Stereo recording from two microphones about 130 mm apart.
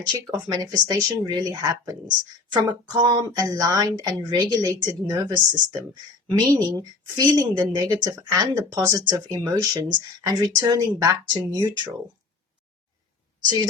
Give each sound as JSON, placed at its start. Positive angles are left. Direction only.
{"t": 0.5, "sound": "speech", "side_deg": -30}